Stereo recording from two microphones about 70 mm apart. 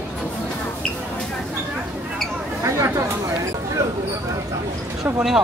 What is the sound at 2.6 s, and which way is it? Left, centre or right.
Speech, right.